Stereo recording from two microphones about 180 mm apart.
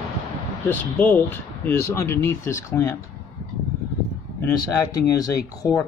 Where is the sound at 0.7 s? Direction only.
10° left (ahead or behind).